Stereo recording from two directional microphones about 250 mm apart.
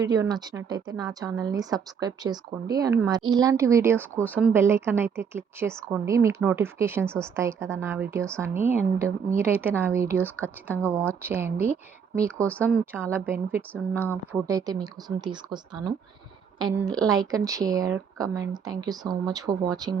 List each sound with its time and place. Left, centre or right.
0.0 s speech: centre
12.4 s speech: centre
12.9 s speech: centre